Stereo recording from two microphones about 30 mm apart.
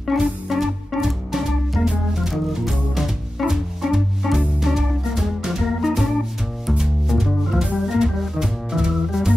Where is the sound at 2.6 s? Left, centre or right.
Centre.